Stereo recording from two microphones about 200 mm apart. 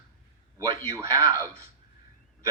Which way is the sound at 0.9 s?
15° right (ahead or behind).